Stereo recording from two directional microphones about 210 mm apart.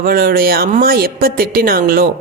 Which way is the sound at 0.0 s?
45° right (ahead or behind).